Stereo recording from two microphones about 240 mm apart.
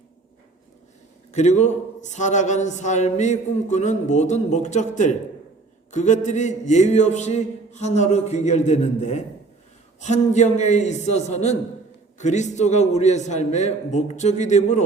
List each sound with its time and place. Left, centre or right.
1.3 s a man's voice: left